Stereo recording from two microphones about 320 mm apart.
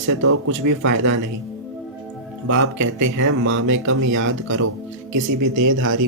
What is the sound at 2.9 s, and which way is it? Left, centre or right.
Speech, right.